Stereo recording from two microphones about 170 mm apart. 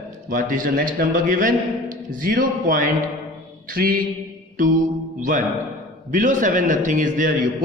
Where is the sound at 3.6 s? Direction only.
60° right (ahead or behind).